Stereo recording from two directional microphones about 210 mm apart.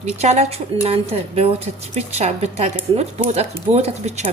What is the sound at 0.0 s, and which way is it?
A woman's voice, 30° right (ahead or behind).